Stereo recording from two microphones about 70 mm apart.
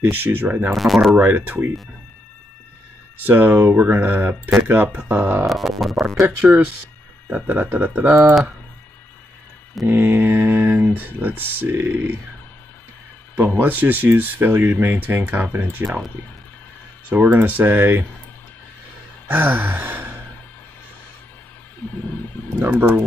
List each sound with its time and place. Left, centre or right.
0.0 s speech: right
0.7 s music: centre
1.1 s speech: right
3.2 s speech: right
5.5 s music: centre
6.2 s speech: right
9.8 s speech: right
13.6 s speech: right
17.3 s speech: right
19.2 s sigh: right
21.8 s a sound: left
22.6 s speech: right